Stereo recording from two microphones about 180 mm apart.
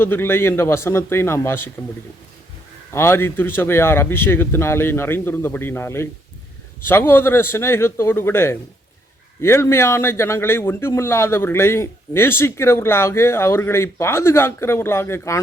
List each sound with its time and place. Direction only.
0.0 s a man's voice: 10° left (ahead or behind)
2.9 s a man's voice: 15° left (ahead or behind)